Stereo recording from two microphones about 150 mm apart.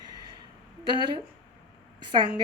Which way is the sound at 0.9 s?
30° right (ahead or behind).